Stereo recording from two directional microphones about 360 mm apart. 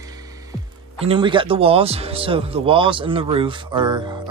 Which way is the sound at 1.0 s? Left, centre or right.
Centre.